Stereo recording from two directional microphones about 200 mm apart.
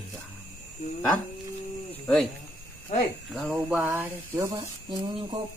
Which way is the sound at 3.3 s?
5° right (ahead or behind).